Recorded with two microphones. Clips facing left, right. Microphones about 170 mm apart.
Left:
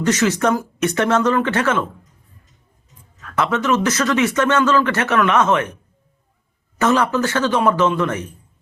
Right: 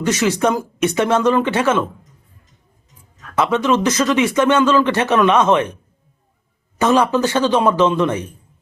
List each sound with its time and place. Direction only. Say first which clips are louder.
0.0 s speech: even; 10° right (ahead or behind)
3.3 s speech: right 2 dB; 15° right (ahead or behind)
6.7 s speech: right 2 dB; 15° right (ahead or behind)